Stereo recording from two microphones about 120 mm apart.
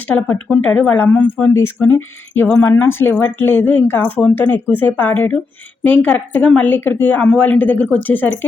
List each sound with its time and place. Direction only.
0.5 s a woman's voice: 10° left (ahead or behind)